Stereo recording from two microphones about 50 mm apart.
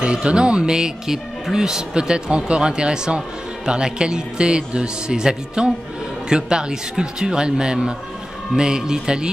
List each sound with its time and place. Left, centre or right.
0.0 s speech: centre